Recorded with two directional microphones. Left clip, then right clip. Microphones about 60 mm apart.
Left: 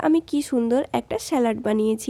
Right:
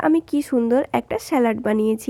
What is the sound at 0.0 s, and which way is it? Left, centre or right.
A woman's voice, right.